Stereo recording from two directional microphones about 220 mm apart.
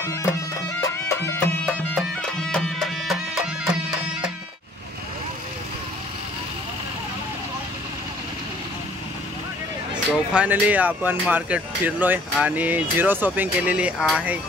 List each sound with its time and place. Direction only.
0.0 s music: 15° left (ahead or behind)
10.1 s speech: 5° right (ahead or behind)